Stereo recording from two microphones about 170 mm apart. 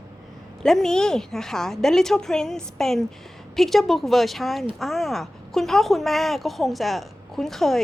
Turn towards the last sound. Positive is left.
turn(degrees=0)  # may be behind; listen again after turning